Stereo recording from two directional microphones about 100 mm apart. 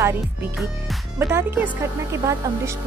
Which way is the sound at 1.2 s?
25° right (ahead or behind).